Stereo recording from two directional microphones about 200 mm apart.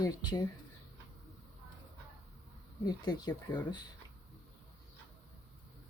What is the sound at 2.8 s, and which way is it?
Speech, 20° left (ahead or behind).